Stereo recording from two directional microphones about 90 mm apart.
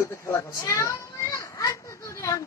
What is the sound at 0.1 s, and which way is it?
A child's voice, 35° left (ahead or behind).